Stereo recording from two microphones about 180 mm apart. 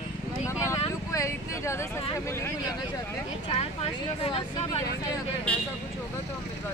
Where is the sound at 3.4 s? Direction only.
30° left (ahead or behind).